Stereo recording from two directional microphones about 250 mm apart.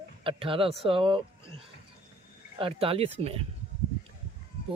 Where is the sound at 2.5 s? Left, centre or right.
Right.